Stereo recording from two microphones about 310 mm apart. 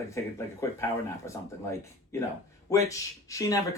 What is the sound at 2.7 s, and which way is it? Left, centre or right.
Speech, centre.